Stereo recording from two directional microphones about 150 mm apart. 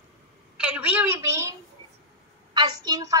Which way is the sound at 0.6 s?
10° right (ahead or behind).